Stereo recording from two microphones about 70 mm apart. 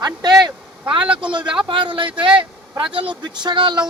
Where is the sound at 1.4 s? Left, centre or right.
Centre.